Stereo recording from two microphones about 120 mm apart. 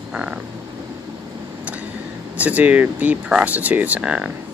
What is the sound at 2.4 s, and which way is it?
Speech, 10° right (ahead or behind).